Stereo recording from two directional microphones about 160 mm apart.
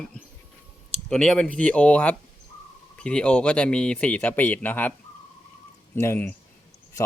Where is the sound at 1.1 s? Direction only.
5° left (ahead or behind).